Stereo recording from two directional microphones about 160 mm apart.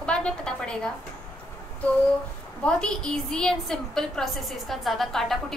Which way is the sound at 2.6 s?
5° left (ahead or behind).